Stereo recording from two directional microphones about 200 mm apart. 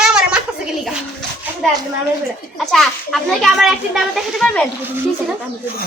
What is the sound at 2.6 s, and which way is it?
A child's voice, centre (ahead or behind).